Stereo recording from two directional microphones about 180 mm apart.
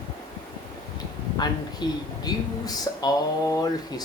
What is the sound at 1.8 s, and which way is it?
Speech, 25° left (ahead or behind).